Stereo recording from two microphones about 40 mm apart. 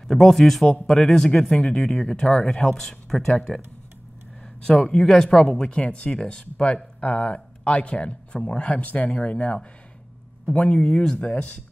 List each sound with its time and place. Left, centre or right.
0.1 s speech: centre
1.6 s speech: left
4.6 s speech: centre
5.7 s speech: left
10.6 s speech: left
11.1 s speech: left